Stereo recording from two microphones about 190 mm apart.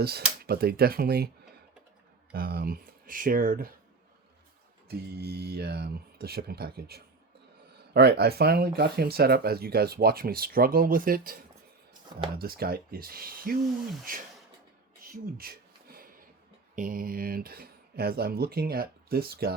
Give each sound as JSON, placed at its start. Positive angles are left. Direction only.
{"t": 0.0, "sound": "speech", "side_deg": -55}
{"t": 2.3, "sound": "speech", "side_deg": -55}
{"t": 4.9, "sound": "speech", "side_deg": -55}
{"t": 12.4, "sound": "speech", "side_deg": -55}
{"t": 15.1, "sound": "a sound", "side_deg": -50}
{"t": 16.7, "sound": "speech", "side_deg": -45}